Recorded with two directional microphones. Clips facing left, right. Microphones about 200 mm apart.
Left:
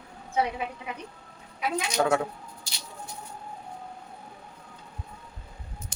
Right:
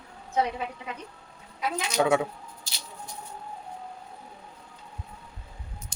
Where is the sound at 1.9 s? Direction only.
5° right (ahead or behind).